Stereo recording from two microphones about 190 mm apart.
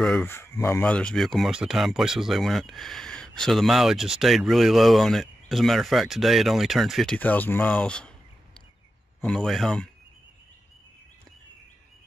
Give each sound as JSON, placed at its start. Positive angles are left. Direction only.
{"t": 0.0, "sound": "speech", "side_deg": 5}
{"t": 9.2, "sound": "speech", "side_deg": 0}